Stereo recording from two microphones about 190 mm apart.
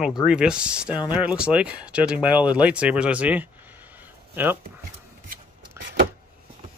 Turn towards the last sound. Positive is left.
turn(degrees=-70)  # may be behind; listen again after turning